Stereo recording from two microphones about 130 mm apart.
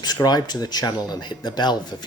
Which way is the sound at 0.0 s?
30° left (ahead or behind).